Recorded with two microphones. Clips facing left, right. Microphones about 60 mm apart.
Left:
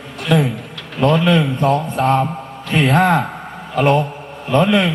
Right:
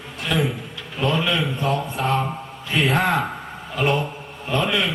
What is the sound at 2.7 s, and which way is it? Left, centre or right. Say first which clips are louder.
A man's voice: left 6 dB; left.